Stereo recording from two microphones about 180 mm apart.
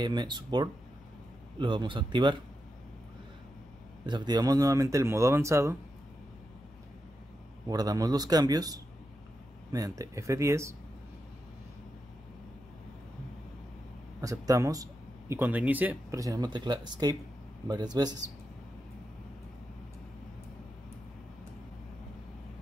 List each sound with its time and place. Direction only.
0.0 s a man's voice: 25° right (ahead or behind)
4.0 s speech: 25° right (ahead or behind)
7.6 s a man's voice: 20° right (ahead or behind)
14.2 s a man's voice: 20° right (ahead or behind)